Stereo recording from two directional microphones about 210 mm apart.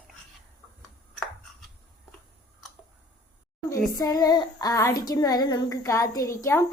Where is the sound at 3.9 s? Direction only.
15° left (ahead or behind).